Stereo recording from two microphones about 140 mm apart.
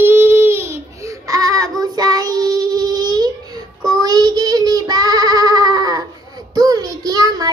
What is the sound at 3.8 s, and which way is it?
Child singing, 25° right (ahead or behind).